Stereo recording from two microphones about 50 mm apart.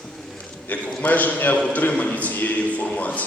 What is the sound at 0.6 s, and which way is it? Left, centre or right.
A man's voice, left.